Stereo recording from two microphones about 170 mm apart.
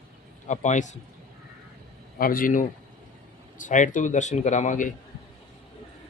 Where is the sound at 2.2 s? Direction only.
55° left (ahead or behind).